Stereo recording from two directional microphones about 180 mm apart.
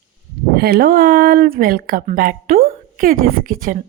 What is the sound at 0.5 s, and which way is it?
Speech, 60° right (ahead or behind).